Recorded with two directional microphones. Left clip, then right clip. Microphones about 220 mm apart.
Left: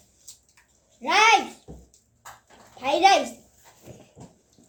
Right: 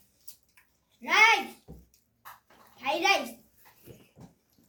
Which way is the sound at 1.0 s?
15° right (ahead or behind).